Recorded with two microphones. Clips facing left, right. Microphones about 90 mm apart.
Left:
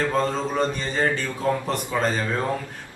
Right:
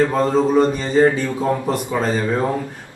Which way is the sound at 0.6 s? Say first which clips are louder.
Right 8 dB; 20° right (ahead or behind).